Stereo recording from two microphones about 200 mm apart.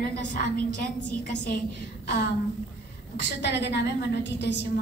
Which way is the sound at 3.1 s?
60° left (ahead or behind).